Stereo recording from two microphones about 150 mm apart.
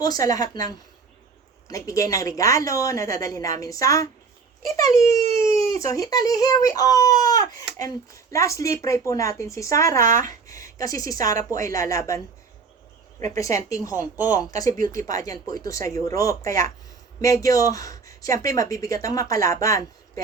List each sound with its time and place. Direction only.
0.0 s speech: 25° left (ahead or behind)
5.5 s speech: 20° left (ahead or behind)
13.3 s speech: 20° left (ahead or behind)